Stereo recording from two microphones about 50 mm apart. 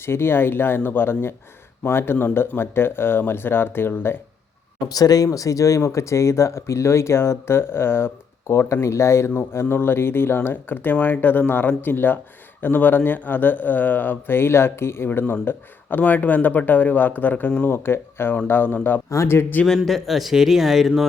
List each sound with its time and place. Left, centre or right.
0.0 s speech: left
5.5 s speech: left
8.4 s speech: left
9.5 s speech: left
17.7 s speech: left
19.1 s speech: left
19.4 s speech: left
19.6 s speech: centre